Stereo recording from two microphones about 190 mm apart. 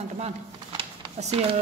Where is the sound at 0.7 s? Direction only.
30° right (ahead or behind).